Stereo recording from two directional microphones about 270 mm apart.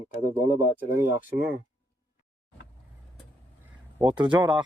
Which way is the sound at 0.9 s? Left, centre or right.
Centre.